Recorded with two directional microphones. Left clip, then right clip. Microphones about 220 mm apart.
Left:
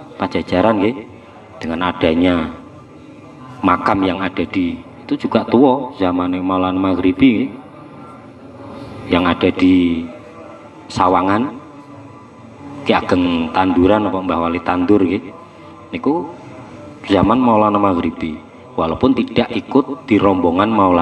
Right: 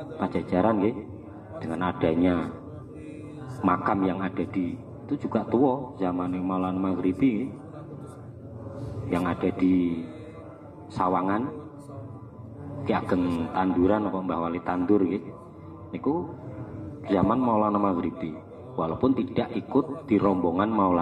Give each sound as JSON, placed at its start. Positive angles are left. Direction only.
{"t": 0.2, "sound": "a man's voice", "side_deg": 30}
{"t": 3.6, "sound": "a man's voice", "side_deg": 35}
{"t": 9.1, "sound": "a man's voice", "side_deg": 40}
{"t": 12.8, "sound": "a man's voice", "side_deg": 35}